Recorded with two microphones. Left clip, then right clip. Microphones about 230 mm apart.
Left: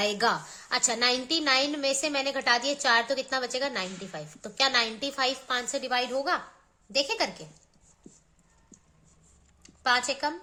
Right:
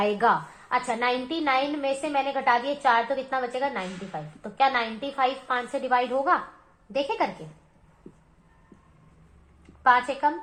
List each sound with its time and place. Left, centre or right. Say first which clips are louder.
0.0 s a woman's voice: right 4 dB; left
9.8 s a woman's voice: right 5 dB; left